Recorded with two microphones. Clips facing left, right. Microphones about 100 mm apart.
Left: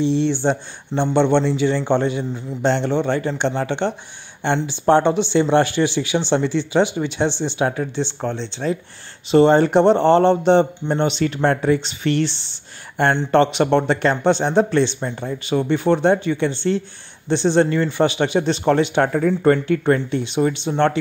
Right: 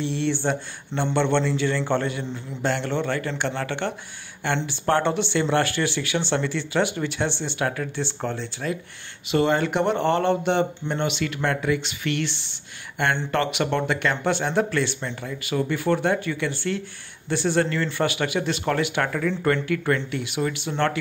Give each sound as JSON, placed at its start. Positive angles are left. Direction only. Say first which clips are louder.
{"t": 0.0, "sound": "a man's voice", "louder": "left 6 dB", "side_deg": 20}